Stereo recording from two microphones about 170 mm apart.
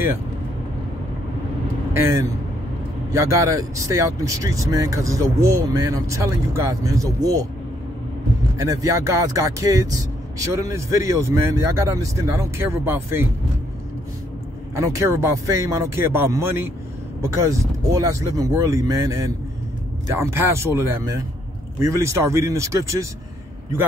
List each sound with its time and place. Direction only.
3.1 s speech: 20° right (ahead or behind)
8.5 s speech: 20° right (ahead or behind)
14.8 s speech: 15° right (ahead or behind)